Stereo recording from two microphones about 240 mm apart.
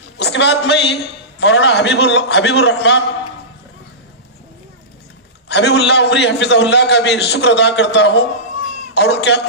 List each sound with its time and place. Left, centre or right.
0.2 s a man's voice: left
5.5 s a man's voice: left